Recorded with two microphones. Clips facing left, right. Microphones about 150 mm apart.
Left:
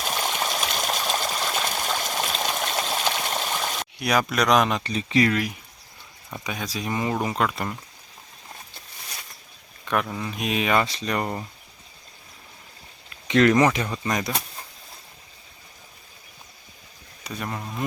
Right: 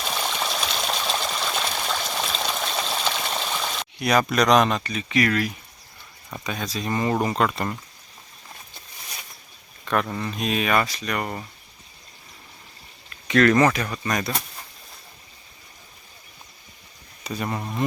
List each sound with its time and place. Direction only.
0.0 s water: 10° left (ahead or behind)
4.8 s speech: 30° left (ahead or behind)
5.3 s speech: 15° left (ahead or behind)
9.9 s speech: 5° left (ahead or behind); by 11.3 s 25° left (ahead or behind)
13.2 s speech: 20° left (ahead or behind)
17.2 s speech: 5° right (ahead or behind)